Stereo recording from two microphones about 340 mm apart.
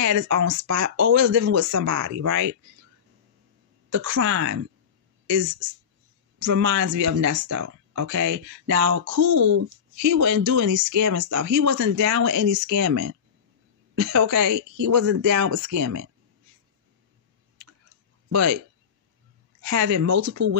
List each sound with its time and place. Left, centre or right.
0.0 s speech: right
3.9 s speech: right
18.3 s speech: right
19.6 s speech: right